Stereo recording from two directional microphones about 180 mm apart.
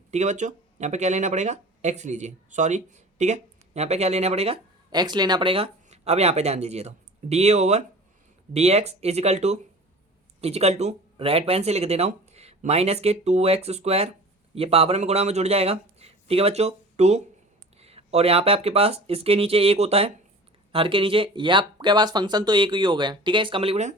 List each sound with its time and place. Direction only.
0.1 s speech: 40° right (ahead or behind)